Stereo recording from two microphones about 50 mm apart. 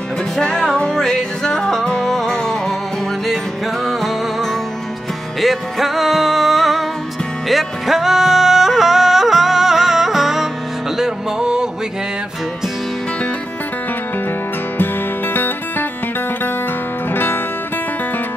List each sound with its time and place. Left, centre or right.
0.4 s music: centre
3.8 s music: centre
7.4 s yodeling: centre
11.0 s music: centre
17.1 s music: left